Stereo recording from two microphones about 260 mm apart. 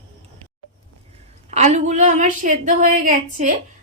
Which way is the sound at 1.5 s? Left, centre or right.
Right.